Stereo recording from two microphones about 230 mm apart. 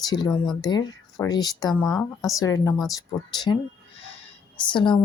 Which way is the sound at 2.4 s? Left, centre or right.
Centre.